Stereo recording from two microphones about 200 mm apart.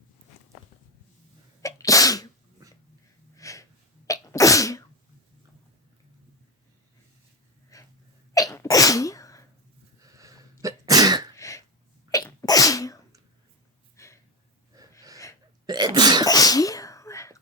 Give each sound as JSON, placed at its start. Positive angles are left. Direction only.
{"t": 1.6, "sound": "sneeze", "side_deg": 15}
{"t": 3.3, "sound": "sneeze", "side_deg": 15}
{"t": 7.7, "sound": "a sound", "side_deg": 15}
{"t": 8.3, "sound": "sneeze", "side_deg": 15}
{"t": 10.0, "sound": "sneeze", "side_deg": -15}
{"t": 11.3, "sound": "a sound", "side_deg": 15}
{"t": 12.1, "sound": "sneeze", "side_deg": 20}
{"t": 13.9, "sound": "a sound", "side_deg": 15}
{"t": 14.7, "sound": "gasp", "side_deg": -15}
{"t": 15.6, "sound": "sneeze", "side_deg": -20}
{"t": 16.2, "sound": "sneeze", "side_deg": 20}